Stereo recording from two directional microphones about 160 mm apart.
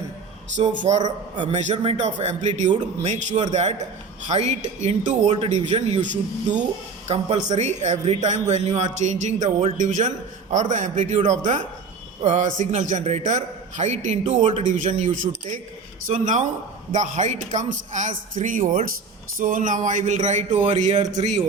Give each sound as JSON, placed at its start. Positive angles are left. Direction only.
{"t": 0.8, "sound": "a man's voice", "side_deg": -45}
{"t": 1.0, "sound": "a man's voice", "side_deg": -30}
{"t": 1.5, "sound": "a man's voice", "side_deg": -45}